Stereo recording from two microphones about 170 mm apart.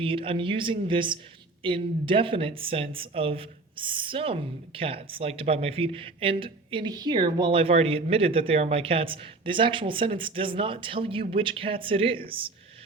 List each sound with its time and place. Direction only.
0.0 s a man's voice: 30° right (ahead or behind)